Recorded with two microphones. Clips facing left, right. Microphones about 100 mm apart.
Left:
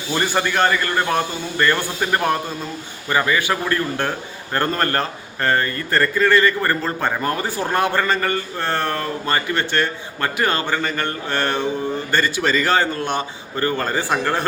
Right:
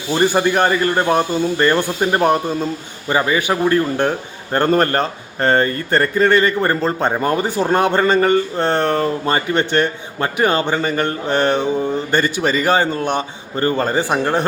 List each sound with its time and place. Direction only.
0.1 s a man's voice: 20° right (ahead or behind)